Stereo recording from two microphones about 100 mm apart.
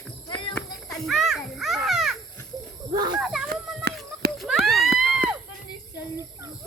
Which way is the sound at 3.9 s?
Centre (ahead or behind).